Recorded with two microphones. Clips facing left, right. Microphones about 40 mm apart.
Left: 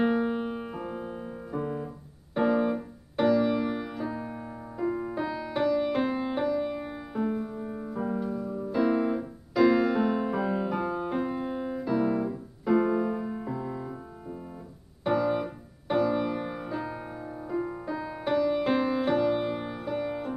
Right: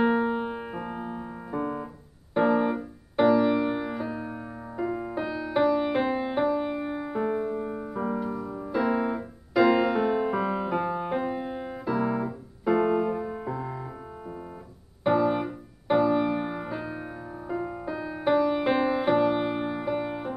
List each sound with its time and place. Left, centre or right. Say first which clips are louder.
0.0 s piano: right 2 dB; centre
2.3 s music: right 2 dB; centre
8.8 s piano: left 1 dB; centre
15.0 s music: right 3 dB; centre
18.2 s music: right 3 dB; centre